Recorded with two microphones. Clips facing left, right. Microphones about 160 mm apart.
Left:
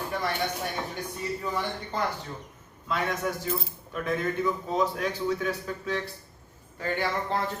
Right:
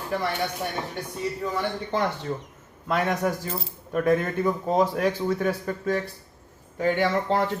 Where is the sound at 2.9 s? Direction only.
55° right (ahead or behind).